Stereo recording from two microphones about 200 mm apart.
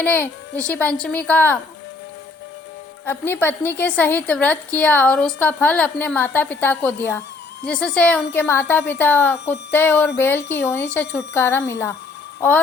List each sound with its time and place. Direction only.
0.0 s a woman's voice: 10° left (ahead or behind)
3.1 s a woman's voice: 10° left (ahead or behind)